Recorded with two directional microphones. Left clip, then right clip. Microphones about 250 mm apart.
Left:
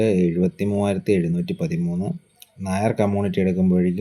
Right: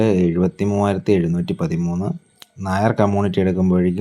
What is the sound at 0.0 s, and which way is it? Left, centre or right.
Speech, centre.